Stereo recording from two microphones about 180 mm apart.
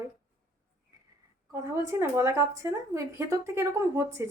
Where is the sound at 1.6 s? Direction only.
15° right (ahead or behind).